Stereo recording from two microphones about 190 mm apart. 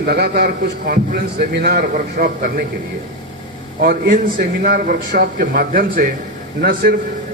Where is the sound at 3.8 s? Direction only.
50° right (ahead or behind).